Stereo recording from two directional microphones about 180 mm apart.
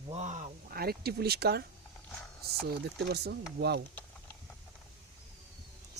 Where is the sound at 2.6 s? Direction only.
65° right (ahead or behind).